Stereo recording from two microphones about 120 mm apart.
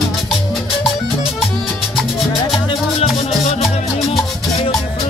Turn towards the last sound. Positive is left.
turn(degrees=55)  # may be behind; listen again after turning